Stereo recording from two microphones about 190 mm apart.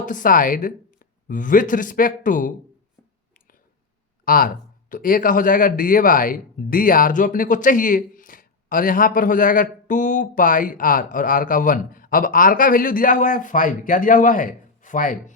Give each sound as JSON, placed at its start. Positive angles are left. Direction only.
{"t": 0.0, "sound": "speech", "side_deg": 45}
{"t": 4.3, "sound": "speech", "side_deg": 50}